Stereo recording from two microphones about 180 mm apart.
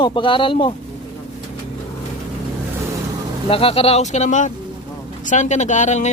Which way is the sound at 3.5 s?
30° left (ahead or behind).